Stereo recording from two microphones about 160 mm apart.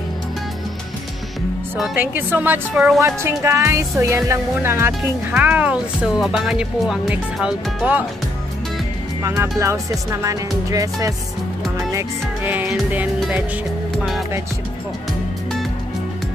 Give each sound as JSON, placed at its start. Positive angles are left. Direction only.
{"t": 1.8, "sound": "music", "side_deg": -10}
{"t": 3.3, "sound": "music", "side_deg": -15}
{"t": 9.4, "sound": "speech", "side_deg": -15}
{"t": 11.9, "sound": "music", "side_deg": -15}